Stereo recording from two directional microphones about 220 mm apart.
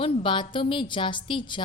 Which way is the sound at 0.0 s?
20° left (ahead or behind).